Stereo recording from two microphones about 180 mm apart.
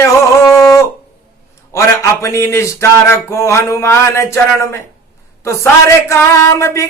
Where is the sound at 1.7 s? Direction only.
15° left (ahead or behind).